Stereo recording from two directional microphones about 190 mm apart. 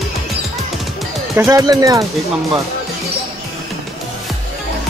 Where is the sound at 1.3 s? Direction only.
15° right (ahead or behind).